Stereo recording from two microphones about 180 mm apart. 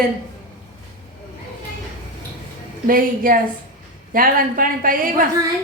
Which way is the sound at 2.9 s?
50° right (ahead or behind).